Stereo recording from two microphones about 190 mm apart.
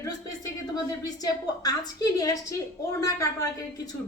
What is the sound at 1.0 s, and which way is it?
A woman's voice, 20° left (ahead or behind).